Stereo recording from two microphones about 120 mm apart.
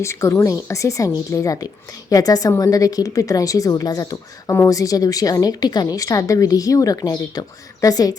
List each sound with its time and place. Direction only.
0.0 s a woman's voice: 25° left (ahead or behind)